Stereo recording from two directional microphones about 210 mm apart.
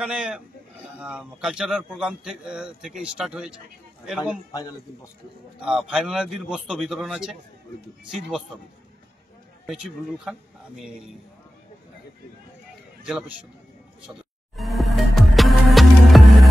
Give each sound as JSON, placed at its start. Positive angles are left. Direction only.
{"t": 0.0, "sound": "a man's voice", "side_deg": -5}
{"t": 4.5, "sound": "a man's voice", "side_deg": 15}
{"t": 5.6, "sound": "a man's voice", "side_deg": -5}
{"t": 9.7, "sound": "a man's voice", "side_deg": 0}
{"t": 13.0, "sound": "a man's voice", "side_deg": 0}
{"t": 14.6, "sound": "music", "side_deg": 0}